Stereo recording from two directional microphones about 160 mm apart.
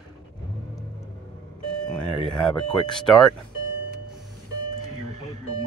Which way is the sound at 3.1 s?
5° left (ahead or behind).